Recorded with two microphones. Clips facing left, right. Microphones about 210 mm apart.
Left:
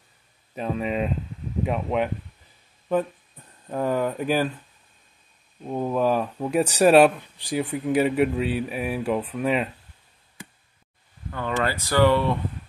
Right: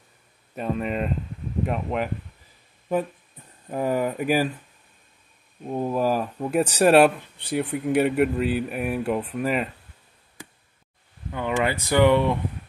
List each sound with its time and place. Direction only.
0.6 s speech: centre (ahead or behind)
3.7 s speech: 10° right (ahead or behind)
5.7 s speech: 5° right (ahead or behind)
11.3 s speech: 15° right (ahead or behind)